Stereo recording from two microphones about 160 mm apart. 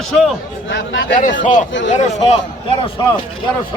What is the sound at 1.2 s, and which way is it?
Speech, 55° left (ahead or behind).